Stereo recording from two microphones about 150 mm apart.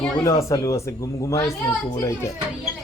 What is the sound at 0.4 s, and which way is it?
A child's voice, 20° left (ahead or behind).